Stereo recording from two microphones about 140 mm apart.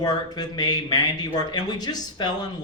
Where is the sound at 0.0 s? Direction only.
30° left (ahead or behind).